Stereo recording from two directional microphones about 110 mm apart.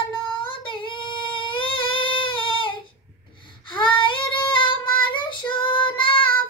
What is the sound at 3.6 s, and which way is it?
Child singing, 50° left (ahead or behind).